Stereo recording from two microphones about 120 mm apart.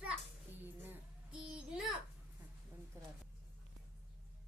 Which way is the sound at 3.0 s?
25° right (ahead or behind).